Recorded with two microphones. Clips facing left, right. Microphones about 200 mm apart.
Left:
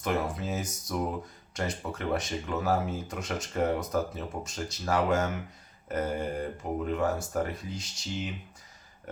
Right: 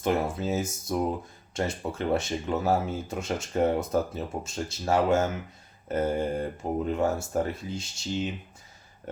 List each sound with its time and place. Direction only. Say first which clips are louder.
0.0 s speech: right 4 dB; 25° right (ahead or behind)